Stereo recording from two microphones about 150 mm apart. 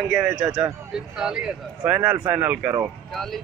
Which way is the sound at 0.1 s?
5° right (ahead or behind).